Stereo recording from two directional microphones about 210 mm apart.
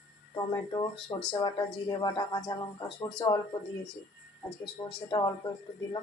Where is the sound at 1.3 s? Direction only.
20° left (ahead or behind).